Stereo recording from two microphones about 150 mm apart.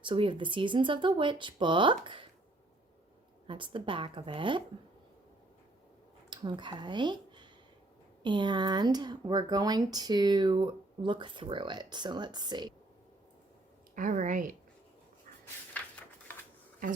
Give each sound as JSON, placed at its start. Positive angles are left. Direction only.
{"t": 0.0, "sound": "speech", "side_deg": -35}
{"t": 3.4, "sound": "speech", "side_deg": -35}
{"t": 6.3, "sound": "speech", "side_deg": -30}
{"t": 13.9, "sound": "a woman's voice", "side_deg": -60}
{"t": 15.7, "sound": "a sound", "side_deg": 10}